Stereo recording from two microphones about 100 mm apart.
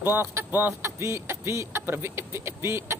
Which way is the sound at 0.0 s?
25° right (ahead or behind).